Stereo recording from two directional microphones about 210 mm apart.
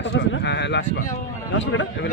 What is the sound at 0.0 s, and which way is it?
A man's voice, 55° left (ahead or behind).